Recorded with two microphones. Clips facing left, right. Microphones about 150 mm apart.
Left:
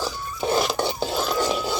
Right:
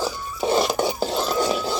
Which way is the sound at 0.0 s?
Centre (ahead or behind).